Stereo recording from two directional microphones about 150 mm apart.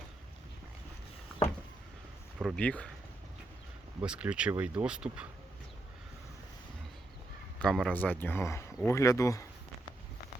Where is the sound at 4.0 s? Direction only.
10° right (ahead or behind).